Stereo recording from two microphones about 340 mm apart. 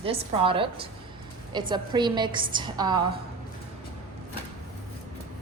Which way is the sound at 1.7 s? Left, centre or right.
Centre.